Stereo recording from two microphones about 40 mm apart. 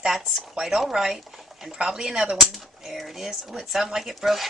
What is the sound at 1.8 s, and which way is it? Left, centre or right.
Speech, centre.